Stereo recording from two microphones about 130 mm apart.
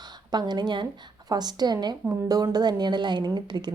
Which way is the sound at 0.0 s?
35° right (ahead or behind).